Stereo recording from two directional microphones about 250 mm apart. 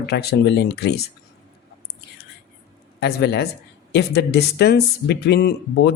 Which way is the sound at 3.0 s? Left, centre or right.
Left.